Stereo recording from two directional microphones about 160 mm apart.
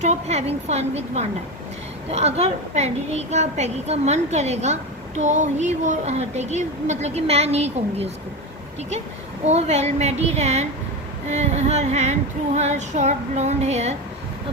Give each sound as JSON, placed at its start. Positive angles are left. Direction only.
{"t": 0.0, "sound": "a woman's voice", "side_deg": -45}
{"t": 9.4, "sound": "a woman's voice", "side_deg": -45}